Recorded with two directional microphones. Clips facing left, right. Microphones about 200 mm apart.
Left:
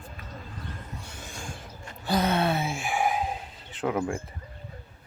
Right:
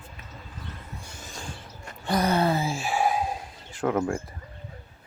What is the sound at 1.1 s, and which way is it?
Vehicle, 10° left (ahead or behind).